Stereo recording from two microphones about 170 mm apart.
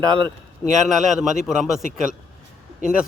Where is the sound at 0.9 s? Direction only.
Centre (ahead or behind).